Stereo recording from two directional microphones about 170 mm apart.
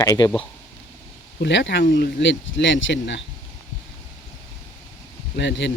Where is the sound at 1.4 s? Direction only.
90° left.